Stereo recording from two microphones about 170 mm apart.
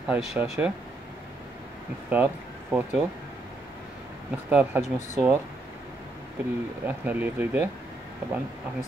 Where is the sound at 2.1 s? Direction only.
10° right (ahead or behind).